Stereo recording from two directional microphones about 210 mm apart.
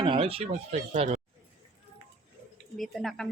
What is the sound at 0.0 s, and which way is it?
Speech, 25° right (ahead or behind).